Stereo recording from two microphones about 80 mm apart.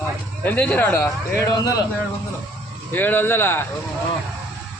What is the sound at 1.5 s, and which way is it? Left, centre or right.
Speech, left.